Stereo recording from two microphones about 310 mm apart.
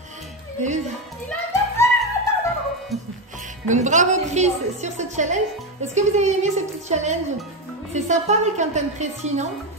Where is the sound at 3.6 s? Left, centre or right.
Right.